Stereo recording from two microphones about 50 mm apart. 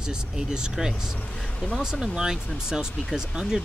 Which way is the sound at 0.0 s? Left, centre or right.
Centre.